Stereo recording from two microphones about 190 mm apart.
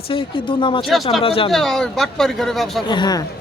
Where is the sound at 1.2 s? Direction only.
30° left (ahead or behind).